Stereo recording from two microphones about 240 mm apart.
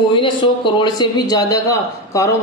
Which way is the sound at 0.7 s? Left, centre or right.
Centre.